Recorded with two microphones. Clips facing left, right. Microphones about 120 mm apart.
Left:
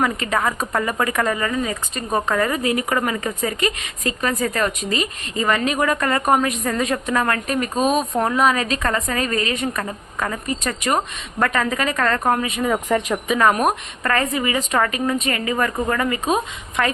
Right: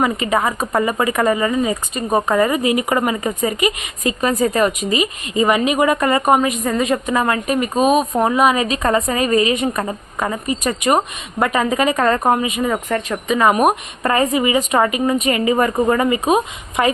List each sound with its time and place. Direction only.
0.0 s speech: 10° right (ahead or behind)
12.9 s speech: 10° left (ahead or behind)
13.2 s speech: centre (ahead or behind)
14.0 s speech: 20° right (ahead or behind)